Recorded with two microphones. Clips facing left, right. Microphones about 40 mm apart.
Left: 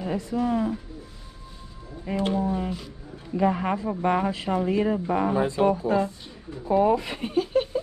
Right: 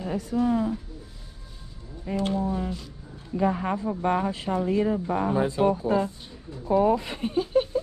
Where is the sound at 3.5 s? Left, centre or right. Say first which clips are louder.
Left 1 dB; left.